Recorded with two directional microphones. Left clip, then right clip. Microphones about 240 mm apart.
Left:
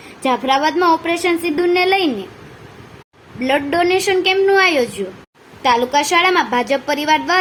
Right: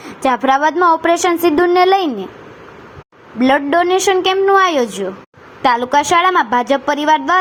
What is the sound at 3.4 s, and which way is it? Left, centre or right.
A woman's voice, centre.